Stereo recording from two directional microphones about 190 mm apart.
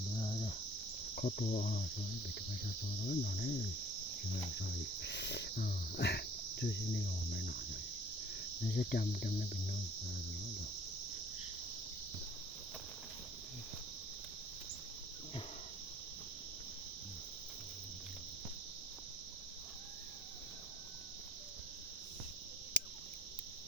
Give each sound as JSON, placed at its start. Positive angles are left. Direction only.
{"t": 0.2, "sound": "cricket", "side_deg": 30}
{"t": 1.1, "sound": "cricket", "side_deg": 45}
{"t": 3.0, "sound": "cricket", "side_deg": 50}
{"t": 4.6, "sound": "speech", "side_deg": 65}
{"t": 8.6, "sound": "cricket", "side_deg": 55}